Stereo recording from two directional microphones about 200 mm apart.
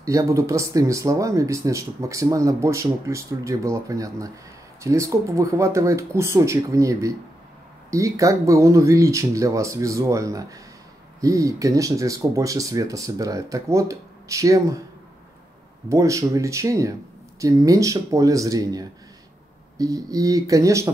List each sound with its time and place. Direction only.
0.0 s speech: 15° right (ahead or behind)
15.9 s speech: 15° right (ahead or behind)